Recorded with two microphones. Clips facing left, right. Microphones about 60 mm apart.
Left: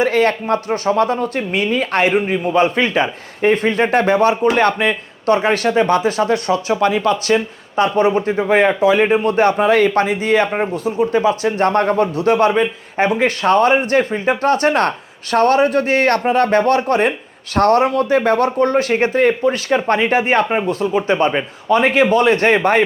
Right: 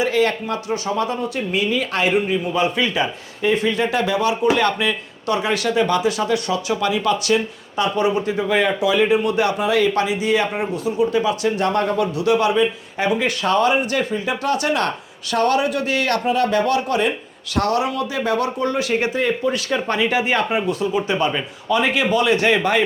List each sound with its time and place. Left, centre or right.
0.0 s speech: left